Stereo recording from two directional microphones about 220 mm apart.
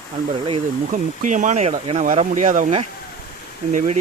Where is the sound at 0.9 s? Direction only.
35° right (ahead or behind).